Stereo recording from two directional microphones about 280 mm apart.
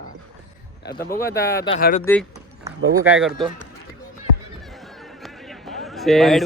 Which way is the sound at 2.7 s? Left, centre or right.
Right.